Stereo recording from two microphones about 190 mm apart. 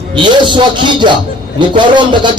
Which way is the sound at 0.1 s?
25° right (ahead or behind).